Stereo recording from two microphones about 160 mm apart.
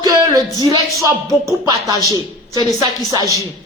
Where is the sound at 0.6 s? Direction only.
25° right (ahead or behind).